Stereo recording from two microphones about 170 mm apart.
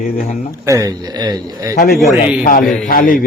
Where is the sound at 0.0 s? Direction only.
55° left (ahead or behind).